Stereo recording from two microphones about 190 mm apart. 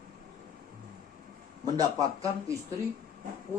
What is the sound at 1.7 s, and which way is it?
Speech, 20° right (ahead or behind).